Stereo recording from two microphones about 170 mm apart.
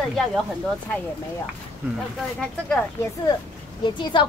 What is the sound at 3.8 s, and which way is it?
Speech, 25° left (ahead or behind).